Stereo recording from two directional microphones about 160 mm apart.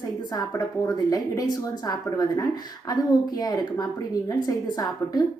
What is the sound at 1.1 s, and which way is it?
A woman's voice, 25° left (ahead or behind).